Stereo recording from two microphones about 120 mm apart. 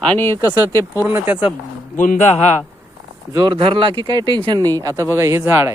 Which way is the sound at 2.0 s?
75° left (ahead or behind).